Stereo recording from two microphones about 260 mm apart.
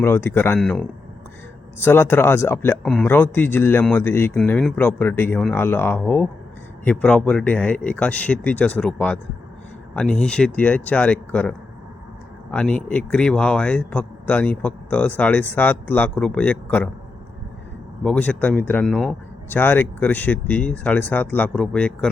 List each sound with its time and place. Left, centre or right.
0.0 s a man's voice: centre
18.0 s a man's voice: centre